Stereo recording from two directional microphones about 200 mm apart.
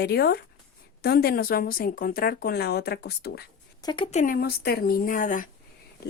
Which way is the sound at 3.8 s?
25° left (ahead or behind).